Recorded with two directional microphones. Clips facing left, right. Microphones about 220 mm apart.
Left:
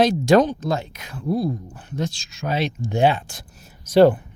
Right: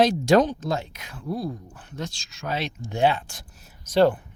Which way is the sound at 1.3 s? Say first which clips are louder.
Left 7 dB; 15° left (ahead or behind).